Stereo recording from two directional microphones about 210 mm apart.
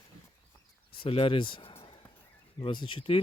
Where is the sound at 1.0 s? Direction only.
25° left (ahead or behind).